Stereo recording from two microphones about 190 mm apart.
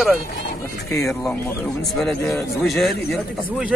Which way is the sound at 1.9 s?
Centre (ahead or behind).